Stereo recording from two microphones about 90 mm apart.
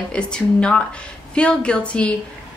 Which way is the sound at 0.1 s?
10° left (ahead or behind).